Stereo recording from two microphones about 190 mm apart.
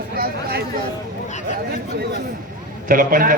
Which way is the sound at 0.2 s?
50° right (ahead or behind).